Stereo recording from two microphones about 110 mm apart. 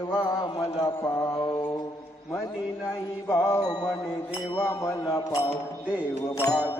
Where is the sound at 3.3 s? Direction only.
25° left (ahead or behind).